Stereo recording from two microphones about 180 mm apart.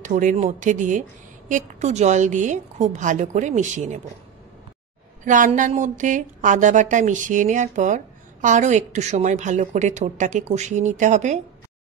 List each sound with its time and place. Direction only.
0.0 s a woman's voice: 45° right (ahead or behind)
5.2 s a woman's voice: 45° right (ahead or behind)